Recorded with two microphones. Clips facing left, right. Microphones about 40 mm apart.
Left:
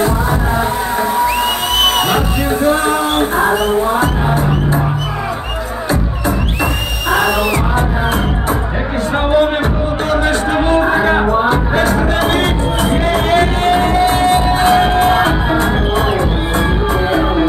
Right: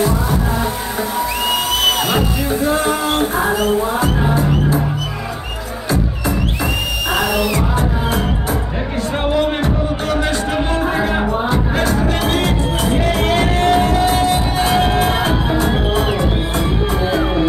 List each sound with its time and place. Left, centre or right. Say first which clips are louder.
2.0 s music: left 3 dB; left
3.5 s music: left 3 dB; left
5.9 s music: left 1 dB; left
10.1 s music: left 5 dB; left
11.4 s music: left 4 dB; left
17.1 s music: left 3 dB; left